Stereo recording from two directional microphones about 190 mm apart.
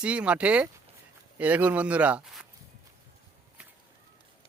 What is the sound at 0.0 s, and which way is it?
Speech, 5° right (ahead or behind).